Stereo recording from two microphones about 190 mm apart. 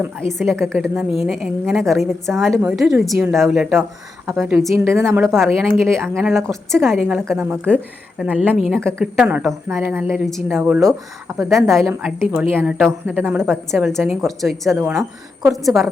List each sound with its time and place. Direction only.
0.2 s a woman's voice: centre (ahead or behind)
4.9 s a woman's voice: 15° right (ahead or behind)
5.4 s a woman's voice: 5° left (ahead or behind); by 11.4 s 15° right (ahead or behind)
12.0 s a woman's voice: 5° right (ahead or behind)